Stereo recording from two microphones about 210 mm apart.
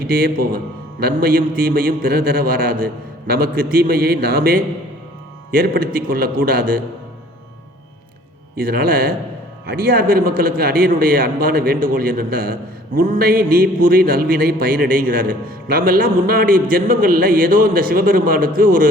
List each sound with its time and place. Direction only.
0.1 s speech: 45° right (ahead or behind)
8.6 s speech: 45° right (ahead or behind)